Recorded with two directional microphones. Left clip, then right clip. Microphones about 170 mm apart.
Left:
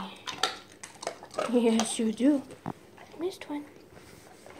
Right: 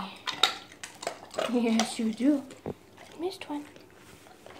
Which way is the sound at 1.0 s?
10° left (ahead or behind).